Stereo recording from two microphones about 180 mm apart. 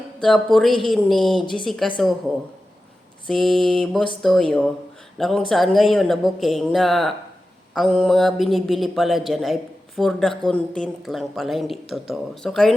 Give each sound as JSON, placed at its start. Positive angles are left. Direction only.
{"t": 0.2, "sound": "speech", "side_deg": 0}
{"t": 1.4, "sound": "speech", "side_deg": 25}
{"t": 1.6, "sound": "speech", "side_deg": 0}
{"t": 3.2, "sound": "speech", "side_deg": 5}